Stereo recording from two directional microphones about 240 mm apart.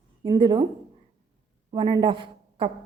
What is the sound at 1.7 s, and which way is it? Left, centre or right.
Speech, centre.